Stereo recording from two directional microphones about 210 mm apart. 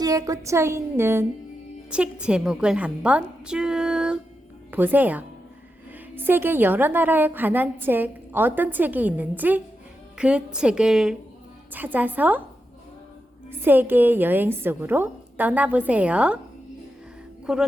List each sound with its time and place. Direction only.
0.0 s a woman's voice: 15° right (ahead or behind)
13.5 s a woman's voice: 10° right (ahead or behind)
17.4 s speech: 5° right (ahead or behind)